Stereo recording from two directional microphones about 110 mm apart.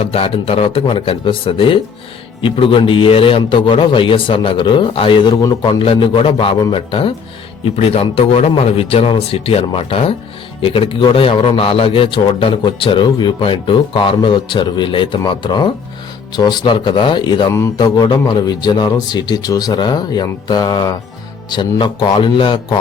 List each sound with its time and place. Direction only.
0.0 s a man's voice: 60° left (ahead or behind)
5.3 s a man's voice: 35° left (ahead or behind)
5.6 s a man's voice: 55° left (ahead or behind)